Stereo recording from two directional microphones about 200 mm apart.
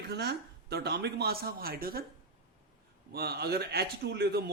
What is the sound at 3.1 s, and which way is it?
Speech, 50° right (ahead or behind).